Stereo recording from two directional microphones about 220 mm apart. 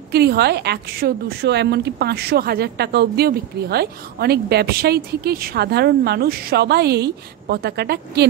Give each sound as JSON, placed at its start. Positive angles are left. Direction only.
{"t": 0.1, "sound": "speech", "side_deg": -45}